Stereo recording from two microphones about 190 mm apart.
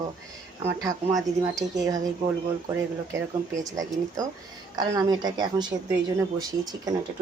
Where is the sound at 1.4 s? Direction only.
20° right (ahead or behind).